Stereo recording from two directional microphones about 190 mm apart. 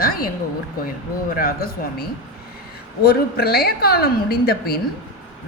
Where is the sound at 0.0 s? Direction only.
50° left (ahead or behind).